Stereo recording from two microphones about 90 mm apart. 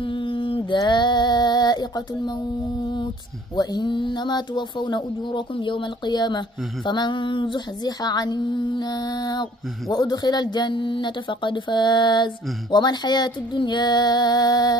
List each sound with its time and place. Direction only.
0.0 s mantra: 70° left (ahead or behind); by 2.4 s 50° left (ahead or behind)
3.5 s speech: 55° left (ahead or behind)
12.7 s female singing: 50° left (ahead or behind)